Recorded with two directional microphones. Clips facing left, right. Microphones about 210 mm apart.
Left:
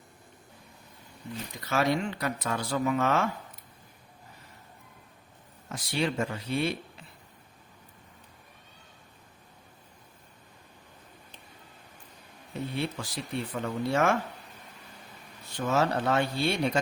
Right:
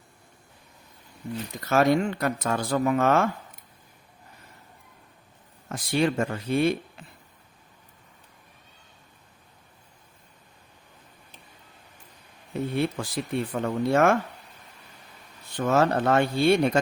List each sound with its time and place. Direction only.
1.6 s speech: 50° right (ahead or behind)
5.6 s speech: 50° right (ahead or behind)
12.7 s speech: 50° right (ahead or behind)
15.5 s speech: 55° right (ahead or behind)